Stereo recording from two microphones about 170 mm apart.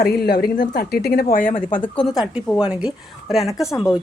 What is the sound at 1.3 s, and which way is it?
Speech, 50° left (ahead or behind).